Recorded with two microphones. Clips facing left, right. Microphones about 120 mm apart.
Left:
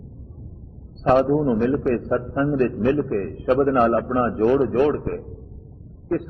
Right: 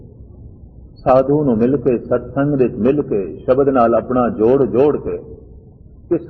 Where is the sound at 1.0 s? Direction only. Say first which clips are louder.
Right 5 dB; 25° right (ahead or behind).